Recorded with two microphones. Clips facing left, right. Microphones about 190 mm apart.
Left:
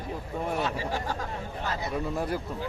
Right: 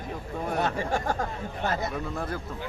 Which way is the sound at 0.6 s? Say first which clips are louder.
Right 3 dB; 55° right (ahead or behind).